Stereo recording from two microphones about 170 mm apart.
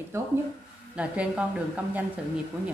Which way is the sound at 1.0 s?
5° right (ahead or behind).